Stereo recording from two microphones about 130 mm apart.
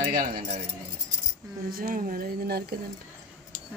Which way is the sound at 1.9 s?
90° right.